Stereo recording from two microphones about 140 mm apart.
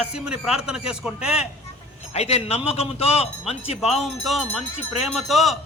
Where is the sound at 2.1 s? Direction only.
50° left (ahead or behind).